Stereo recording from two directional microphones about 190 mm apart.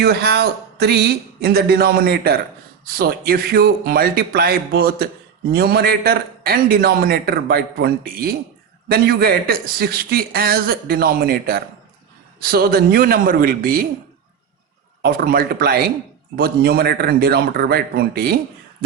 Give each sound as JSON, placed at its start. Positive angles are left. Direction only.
{"t": 0.0, "sound": "a man's voice", "side_deg": -55}
{"t": 15.0, "sound": "a man's voice", "side_deg": -50}